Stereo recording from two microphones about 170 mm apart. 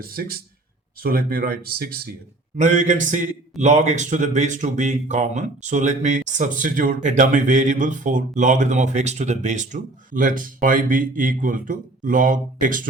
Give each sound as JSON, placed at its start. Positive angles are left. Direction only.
{"t": 0.0, "sound": "speech", "side_deg": -60}
{"t": 2.6, "sound": "speech", "side_deg": -45}